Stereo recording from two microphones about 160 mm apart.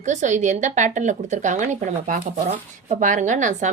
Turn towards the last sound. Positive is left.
turn(degrees=-50)  # may be behind; listen again after turning